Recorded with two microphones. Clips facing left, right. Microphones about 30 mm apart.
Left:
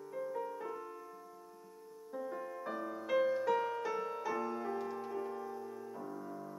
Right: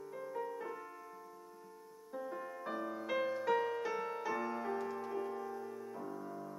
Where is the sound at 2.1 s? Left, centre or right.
Centre.